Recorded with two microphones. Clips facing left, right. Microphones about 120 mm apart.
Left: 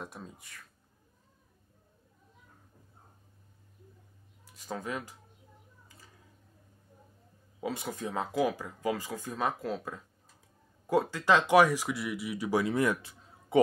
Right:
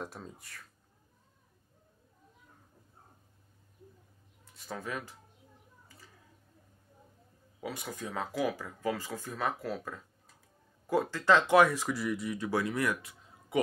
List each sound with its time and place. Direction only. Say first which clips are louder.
0.0 s speech: right 1 dB; centre (ahead or behind)
4.6 s speech: left 2 dB; 15° left (ahead or behind)
7.6 s speech: left 4 dB; 25° left (ahead or behind)
12.6 s speech: left 4 dB; 25° left (ahead or behind)